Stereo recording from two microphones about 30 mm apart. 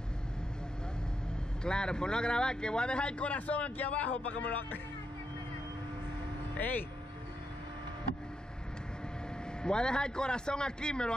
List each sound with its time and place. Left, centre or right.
1.6 s a man's voice: left
3.3 s speech: left
9.6 s a man's voice: left